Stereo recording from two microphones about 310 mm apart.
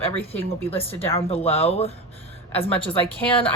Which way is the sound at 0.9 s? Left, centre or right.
Centre.